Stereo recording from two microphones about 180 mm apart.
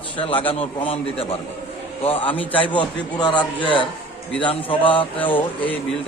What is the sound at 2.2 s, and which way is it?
Speech, 10° left (ahead or behind).